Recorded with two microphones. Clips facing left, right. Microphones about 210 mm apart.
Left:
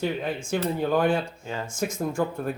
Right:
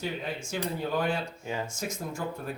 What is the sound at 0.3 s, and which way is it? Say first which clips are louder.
Speech: left 6 dB; 50° left (ahead or behind).